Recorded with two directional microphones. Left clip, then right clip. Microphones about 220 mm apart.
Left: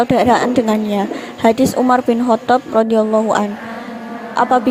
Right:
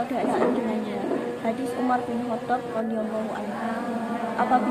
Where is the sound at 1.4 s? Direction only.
45° left (ahead or behind).